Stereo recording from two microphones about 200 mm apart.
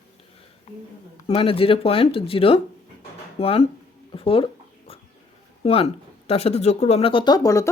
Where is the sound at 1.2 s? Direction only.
30° left (ahead or behind).